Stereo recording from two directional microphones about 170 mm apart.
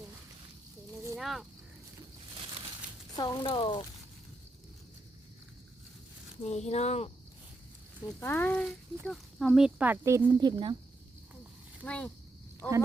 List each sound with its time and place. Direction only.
1.2 s speech: centre (ahead or behind)
3.2 s speech: 25° left (ahead or behind)
6.4 s speech: 40° left (ahead or behind)
8.2 s speech: 10° left (ahead or behind); by 10.2 s 15° right (ahead or behind)
10.2 s speech: 25° right (ahead or behind)
11.9 s speech: 5° left (ahead or behind)